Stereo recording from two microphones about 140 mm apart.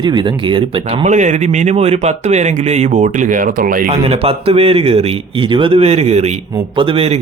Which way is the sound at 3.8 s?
45° right (ahead or behind).